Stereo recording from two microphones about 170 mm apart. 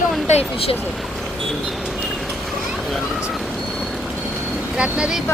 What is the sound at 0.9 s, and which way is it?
Vehicle, centre (ahead or behind).